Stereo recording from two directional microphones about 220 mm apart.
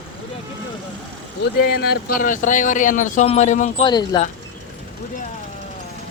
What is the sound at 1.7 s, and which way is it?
Speech, 45° left (ahead or behind).